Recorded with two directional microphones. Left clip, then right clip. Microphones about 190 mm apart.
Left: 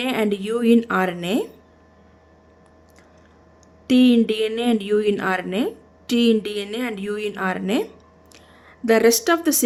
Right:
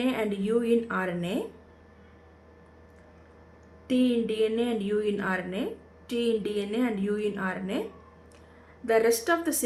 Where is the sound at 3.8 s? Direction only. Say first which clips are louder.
Left 9 dB; 60° left (ahead or behind).